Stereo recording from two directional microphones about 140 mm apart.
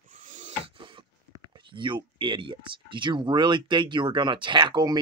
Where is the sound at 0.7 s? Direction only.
35° right (ahead or behind).